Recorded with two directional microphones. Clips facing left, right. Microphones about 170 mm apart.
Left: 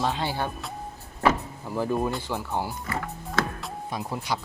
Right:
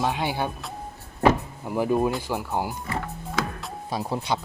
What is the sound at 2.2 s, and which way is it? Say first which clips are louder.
Speech: right 2 dB; 10° right (ahead or behind).